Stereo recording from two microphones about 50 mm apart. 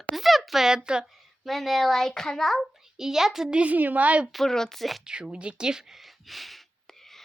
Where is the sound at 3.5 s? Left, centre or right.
Right.